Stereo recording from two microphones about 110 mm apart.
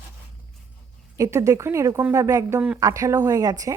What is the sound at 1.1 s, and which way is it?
A woman's voice, 30° right (ahead or behind).